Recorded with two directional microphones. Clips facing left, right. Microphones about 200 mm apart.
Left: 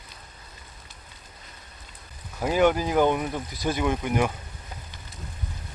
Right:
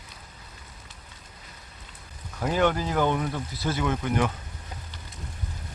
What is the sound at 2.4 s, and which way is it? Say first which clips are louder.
Speech: left 3 dB; 10° left (ahead or behind).